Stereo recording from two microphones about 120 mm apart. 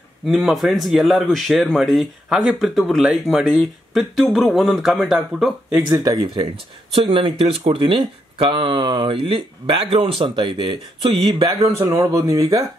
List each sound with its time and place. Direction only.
0.3 s speech: centre (ahead or behind)
5.9 s speech: 30° right (ahead or behind)
6.9 s speech: 45° right (ahead or behind)
11.4 s speech: 30° right (ahead or behind)